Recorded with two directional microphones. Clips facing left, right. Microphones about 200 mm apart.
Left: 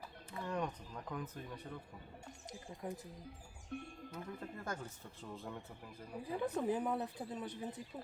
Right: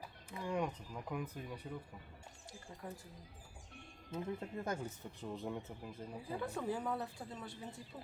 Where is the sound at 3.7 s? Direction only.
50° left (ahead or behind).